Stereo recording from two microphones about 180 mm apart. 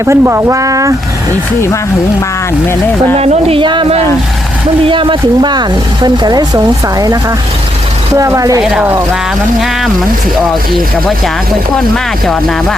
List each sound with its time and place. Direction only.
0.0 s speech: 15° right (ahead or behind)
3.2 s speech: 35° right (ahead or behind)
4.9 s speech: 30° right (ahead or behind)
8.6 s speech: 5° right (ahead or behind)
12.2 s speech: centre (ahead or behind)